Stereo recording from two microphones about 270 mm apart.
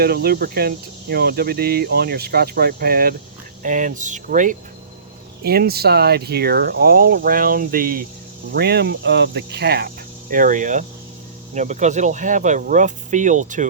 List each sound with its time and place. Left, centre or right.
0.0 s speech: right